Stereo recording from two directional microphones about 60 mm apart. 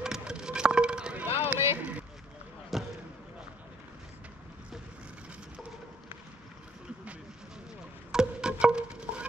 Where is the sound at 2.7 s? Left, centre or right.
Centre.